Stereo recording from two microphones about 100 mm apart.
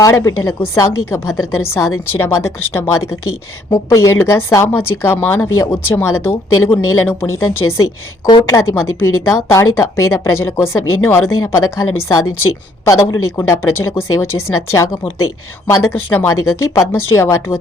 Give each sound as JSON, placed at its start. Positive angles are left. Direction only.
{"t": 0.0, "sound": "a woman's voice", "side_deg": 35}